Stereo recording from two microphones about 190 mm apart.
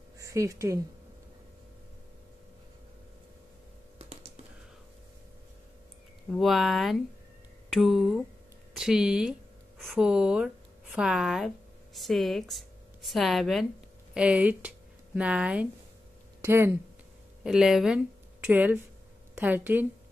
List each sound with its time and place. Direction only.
0.2 s speech: 15° right (ahead or behind)
4.0 s typing: 30° right (ahead or behind)
6.3 s speech: centre (ahead or behind)
17.4 s speech: 5° right (ahead or behind)